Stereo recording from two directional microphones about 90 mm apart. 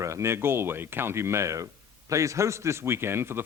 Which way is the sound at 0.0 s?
35° right (ahead or behind).